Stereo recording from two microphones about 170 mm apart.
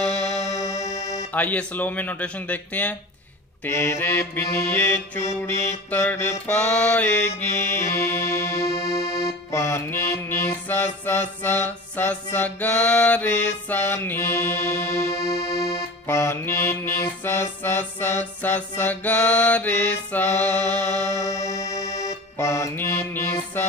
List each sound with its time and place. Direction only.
0.1 s music: 40° left (ahead or behind)
1.3 s music: 10° left (ahead or behind)
16.1 s music: 15° left (ahead or behind)